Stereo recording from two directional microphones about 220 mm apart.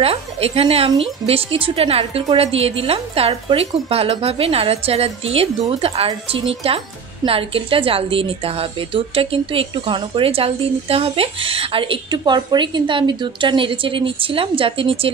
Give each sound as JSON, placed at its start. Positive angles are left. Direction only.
{"t": 0.0, "sound": "a woman's voice", "side_deg": -25}